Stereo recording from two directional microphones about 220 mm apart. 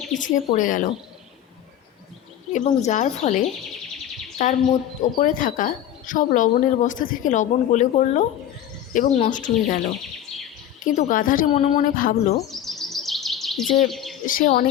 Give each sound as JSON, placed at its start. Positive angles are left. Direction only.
{"t": 0.1, "sound": "speech", "side_deg": 35}
{"t": 2.5, "sound": "speech", "side_deg": 35}
{"t": 10.8, "sound": "speech", "side_deg": 40}
{"t": 12.5, "sound": "bird vocalization", "side_deg": 0}
{"t": 13.9, "sound": "speech", "side_deg": 0}
{"t": 14.3, "sound": "speech", "side_deg": 40}